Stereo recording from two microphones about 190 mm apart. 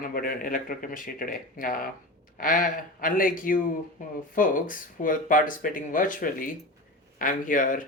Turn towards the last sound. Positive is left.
turn(degrees=45)  # may be behind; listen again after turning